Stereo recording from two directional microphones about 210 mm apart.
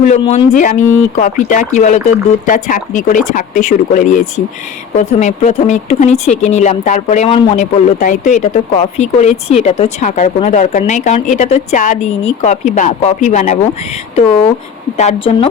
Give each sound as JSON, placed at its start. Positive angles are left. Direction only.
{"t": 0.2, "sound": "speech", "side_deg": 30}
{"t": 14.9, "sound": "speech", "side_deg": 30}